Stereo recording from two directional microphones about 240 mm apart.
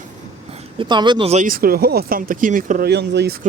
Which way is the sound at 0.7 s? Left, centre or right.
Centre.